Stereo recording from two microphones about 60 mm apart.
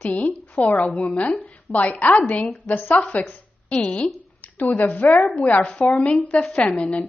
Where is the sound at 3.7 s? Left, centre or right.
Centre.